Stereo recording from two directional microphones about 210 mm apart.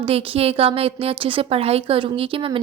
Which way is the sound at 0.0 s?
30° right (ahead or behind).